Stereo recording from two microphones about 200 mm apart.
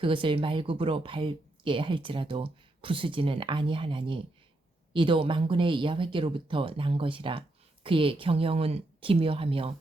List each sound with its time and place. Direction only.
0.0 s speech: 25° right (ahead or behind)